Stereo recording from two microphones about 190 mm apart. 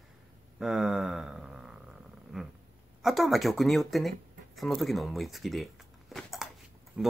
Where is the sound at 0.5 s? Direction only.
Centre (ahead or behind).